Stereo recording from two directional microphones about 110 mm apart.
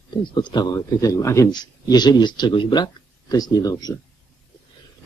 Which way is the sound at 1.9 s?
40° left (ahead or behind).